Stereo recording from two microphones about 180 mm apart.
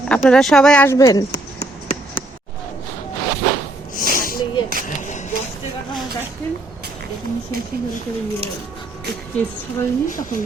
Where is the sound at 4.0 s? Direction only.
50° left (ahead or behind).